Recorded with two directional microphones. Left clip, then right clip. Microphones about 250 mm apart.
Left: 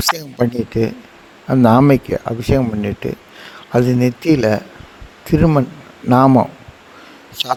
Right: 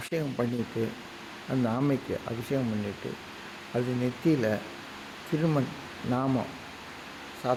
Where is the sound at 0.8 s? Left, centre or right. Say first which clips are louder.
Left 13 dB; left.